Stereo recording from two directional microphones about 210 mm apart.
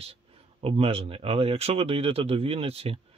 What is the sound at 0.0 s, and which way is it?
Speech, 25° right (ahead or behind).